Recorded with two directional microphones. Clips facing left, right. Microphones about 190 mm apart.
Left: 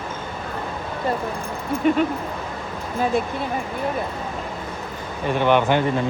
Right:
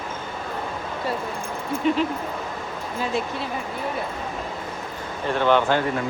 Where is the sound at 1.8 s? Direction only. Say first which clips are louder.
Left 3 dB; 55° left (ahead or behind).